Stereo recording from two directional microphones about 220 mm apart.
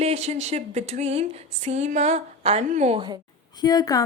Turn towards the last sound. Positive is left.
turn(degrees=15)  # may be behind; listen again after turning